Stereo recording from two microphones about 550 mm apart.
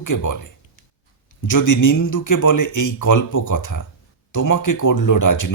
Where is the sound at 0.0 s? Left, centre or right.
Left.